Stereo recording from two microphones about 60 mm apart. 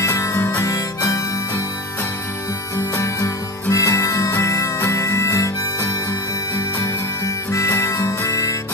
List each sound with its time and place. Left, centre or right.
0.0 s music: left
0.6 s harmonica: left
3.7 s music: left
7.5 s music: left